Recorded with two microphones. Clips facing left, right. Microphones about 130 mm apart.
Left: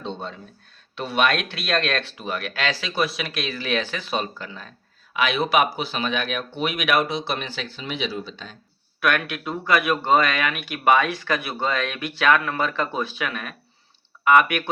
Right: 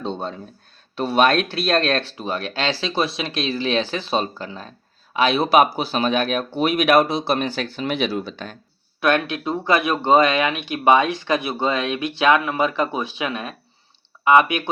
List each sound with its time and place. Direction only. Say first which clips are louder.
0.0 s a sound: right 5 dB; 40° right (ahead or behind)
0.9 s speech: right 5 dB; 35° right (ahead or behind); by 8.5 s 60° right (ahead or behind)
9.0 s speech: right 4 dB; 25° right (ahead or behind)